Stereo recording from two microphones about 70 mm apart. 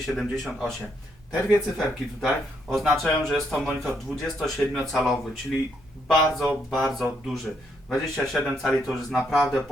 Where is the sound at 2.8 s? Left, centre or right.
Centre.